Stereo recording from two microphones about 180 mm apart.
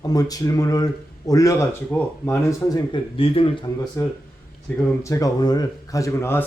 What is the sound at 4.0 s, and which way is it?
Speech, 15° left (ahead or behind).